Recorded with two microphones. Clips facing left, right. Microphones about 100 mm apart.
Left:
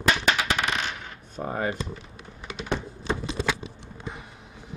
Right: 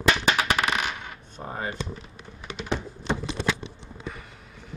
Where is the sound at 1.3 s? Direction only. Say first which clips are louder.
Left 5 dB; 45° left (ahead or behind).